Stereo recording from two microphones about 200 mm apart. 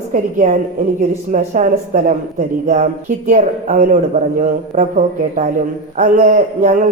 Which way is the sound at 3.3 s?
40° right (ahead or behind).